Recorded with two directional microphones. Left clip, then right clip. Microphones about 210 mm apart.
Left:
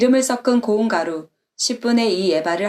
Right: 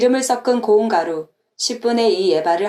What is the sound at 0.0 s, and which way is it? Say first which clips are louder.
A woman's voice: right 1 dB; 30° left (ahead or behind).